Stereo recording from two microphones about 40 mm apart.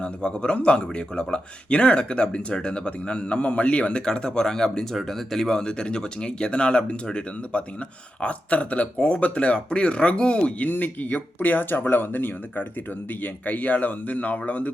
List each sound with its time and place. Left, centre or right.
0.0 s speech: left
4.0 s speech: centre
4.9 s speech: centre
5.5 s speech: left
10.6 s speech: left
13.2 s speech: left